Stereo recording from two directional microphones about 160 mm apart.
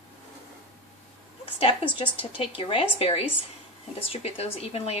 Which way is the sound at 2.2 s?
35° left (ahead or behind).